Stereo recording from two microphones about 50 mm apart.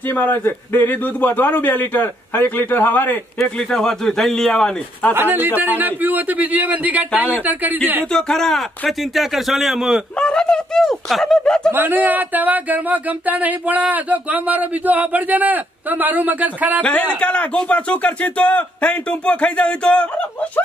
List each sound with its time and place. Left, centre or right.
0.2 s a man's voice: left
3.7 s speech: centre
5.1 s speech: right
8.1 s a man's voice: centre
10.1 s speech: centre
11.4 s speech: centre
11.7 s speech: right
17.2 s speech: left